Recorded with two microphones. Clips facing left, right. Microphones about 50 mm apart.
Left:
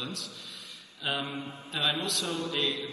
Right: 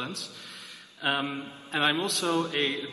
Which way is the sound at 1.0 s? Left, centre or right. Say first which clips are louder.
Right 4 dB; right.